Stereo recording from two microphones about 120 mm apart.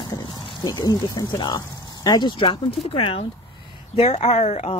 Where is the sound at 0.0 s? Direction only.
35° left (ahead or behind).